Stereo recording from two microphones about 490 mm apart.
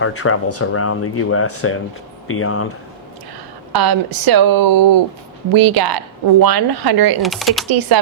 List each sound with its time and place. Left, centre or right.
0.0 s speech: left
3.7 s speech: right
7.2 s speech: centre
7.7 s speech: right